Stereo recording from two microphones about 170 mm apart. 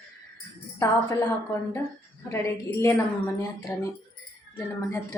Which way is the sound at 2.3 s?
15° left (ahead or behind).